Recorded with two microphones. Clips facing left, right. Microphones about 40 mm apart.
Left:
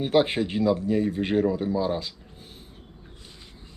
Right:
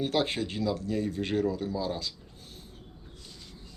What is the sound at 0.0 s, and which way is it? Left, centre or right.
Speech, left.